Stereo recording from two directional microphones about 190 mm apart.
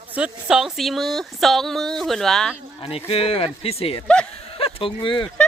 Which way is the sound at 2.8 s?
30° left (ahead or behind).